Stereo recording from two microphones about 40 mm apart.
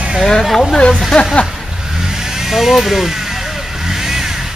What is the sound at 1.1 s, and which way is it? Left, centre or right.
Speech, centre.